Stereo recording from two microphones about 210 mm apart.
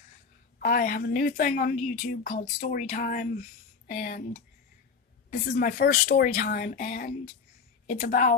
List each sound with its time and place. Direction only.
0.6 s a woman's voice: 45° left (ahead or behind)